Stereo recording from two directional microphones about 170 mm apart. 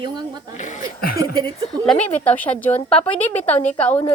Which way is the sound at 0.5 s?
45° left (ahead or behind).